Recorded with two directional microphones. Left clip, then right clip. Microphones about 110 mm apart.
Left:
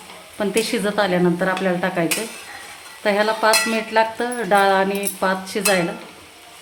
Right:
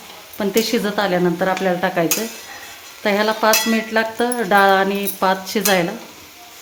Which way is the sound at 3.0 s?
25° right (ahead or behind).